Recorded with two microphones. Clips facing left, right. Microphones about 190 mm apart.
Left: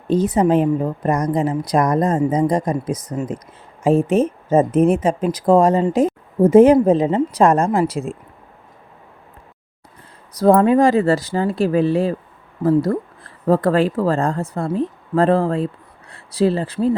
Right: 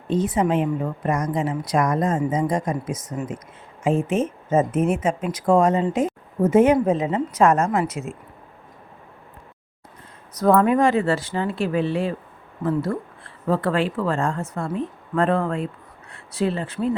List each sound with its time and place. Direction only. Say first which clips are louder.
0.1 s a woman's voice: left 5 dB; 40° left (ahead or behind)
10.3 s a woman's voice: left 4 dB; 30° left (ahead or behind)